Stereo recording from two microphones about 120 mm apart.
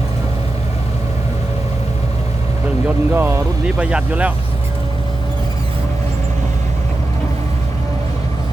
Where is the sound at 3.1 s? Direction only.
20° right (ahead or behind).